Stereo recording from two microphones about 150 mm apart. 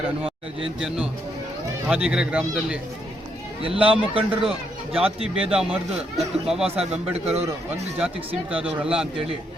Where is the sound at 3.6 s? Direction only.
40° right (ahead or behind).